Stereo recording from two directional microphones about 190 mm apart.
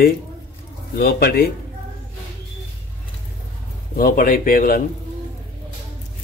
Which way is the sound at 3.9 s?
45° left (ahead or behind).